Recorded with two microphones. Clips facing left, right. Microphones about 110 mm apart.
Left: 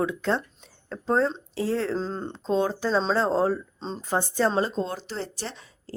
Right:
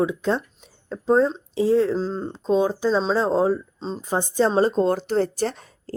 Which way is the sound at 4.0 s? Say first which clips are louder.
Right 3 dB; 15° right (ahead or behind).